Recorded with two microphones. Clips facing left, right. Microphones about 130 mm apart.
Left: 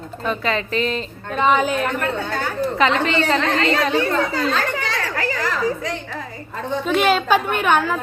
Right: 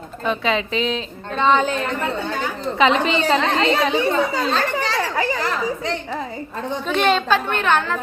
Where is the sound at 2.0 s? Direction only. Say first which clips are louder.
Even; 15° right (ahead or behind).